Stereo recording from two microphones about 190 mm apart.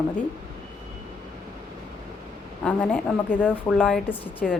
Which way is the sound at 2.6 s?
5° left (ahead or behind).